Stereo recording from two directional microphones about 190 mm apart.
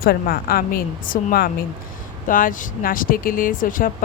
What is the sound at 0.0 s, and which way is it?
Speech, 50° left (ahead or behind).